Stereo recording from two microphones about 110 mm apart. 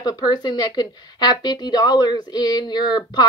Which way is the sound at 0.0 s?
35° left (ahead or behind).